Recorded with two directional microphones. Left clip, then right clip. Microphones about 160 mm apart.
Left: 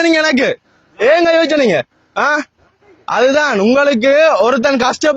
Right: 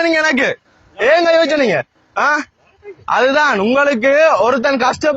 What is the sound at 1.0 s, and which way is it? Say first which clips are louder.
A man's voice: left 1 dB; 65° left (ahead or behind).